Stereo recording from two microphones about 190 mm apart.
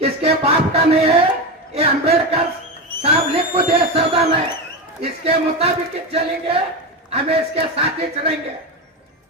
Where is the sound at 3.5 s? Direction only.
30° right (ahead or behind).